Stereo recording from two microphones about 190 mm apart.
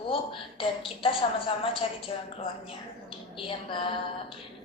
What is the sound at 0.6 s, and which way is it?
A woman's voice, 30° left (ahead or behind).